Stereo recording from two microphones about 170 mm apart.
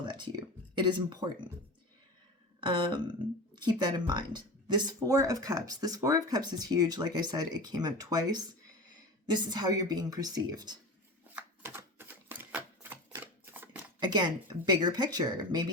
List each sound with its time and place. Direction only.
0.0 s speech: 25° right (ahead or behind)
2.6 s a sound: 30° right (ahead or behind)
3.5 s speech: 25° right (ahead or behind)
11.3 s typewriter: 15° right (ahead or behind)
14.0 s speech: 25° right (ahead or behind)